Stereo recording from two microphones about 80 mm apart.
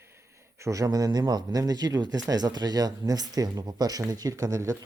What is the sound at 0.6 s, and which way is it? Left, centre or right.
Speech, right.